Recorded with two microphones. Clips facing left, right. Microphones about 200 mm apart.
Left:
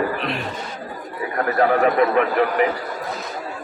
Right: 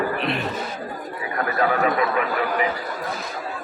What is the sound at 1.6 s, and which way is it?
Speech, 50° left (ahead or behind).